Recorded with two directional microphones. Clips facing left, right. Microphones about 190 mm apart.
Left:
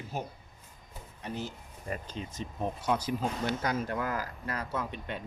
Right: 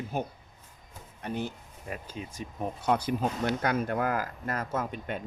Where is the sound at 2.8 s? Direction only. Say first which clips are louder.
Right 4 dB; 55° right (ahead or behind).